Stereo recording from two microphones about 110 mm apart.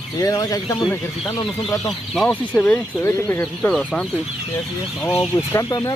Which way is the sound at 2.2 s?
10° left (ahead or behind).